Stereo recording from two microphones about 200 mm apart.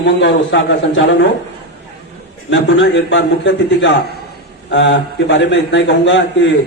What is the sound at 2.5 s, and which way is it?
A man's voice, 60° left (ahead or behind).